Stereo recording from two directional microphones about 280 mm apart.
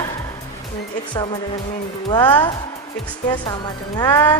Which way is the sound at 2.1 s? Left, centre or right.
Centre.